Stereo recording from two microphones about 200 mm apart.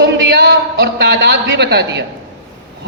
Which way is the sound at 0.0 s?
60° right (ahead or behind).